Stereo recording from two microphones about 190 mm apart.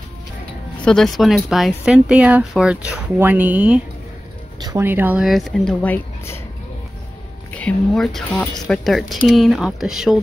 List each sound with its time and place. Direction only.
0.8 s speech: centre (ahead or behind)
7.5 s speech: 5° left (ahead or behind)